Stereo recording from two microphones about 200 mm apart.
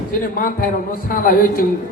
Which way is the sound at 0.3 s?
45° left (ahead or behind).